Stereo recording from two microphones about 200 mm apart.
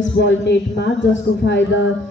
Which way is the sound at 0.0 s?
65° left (ahead or behind).